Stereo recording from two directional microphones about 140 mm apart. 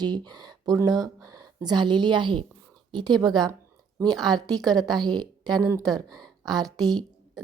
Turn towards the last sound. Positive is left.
turn(degrees=-30)  # may be behind; listen again after turning